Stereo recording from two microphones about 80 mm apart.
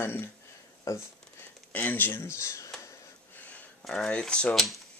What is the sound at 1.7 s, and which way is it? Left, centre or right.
Speech, left.